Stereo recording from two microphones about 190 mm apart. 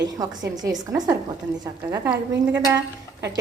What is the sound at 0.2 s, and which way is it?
A woman's voice, 20° right (ahead or behind).